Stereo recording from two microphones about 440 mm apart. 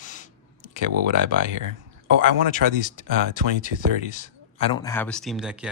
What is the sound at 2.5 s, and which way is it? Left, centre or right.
Speech, centre.